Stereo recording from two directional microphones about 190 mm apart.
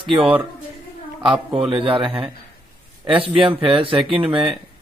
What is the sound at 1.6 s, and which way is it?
Speech, 30° right (ahead or behind).